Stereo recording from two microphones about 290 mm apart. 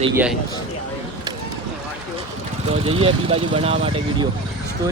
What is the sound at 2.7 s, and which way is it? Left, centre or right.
Speech, centre.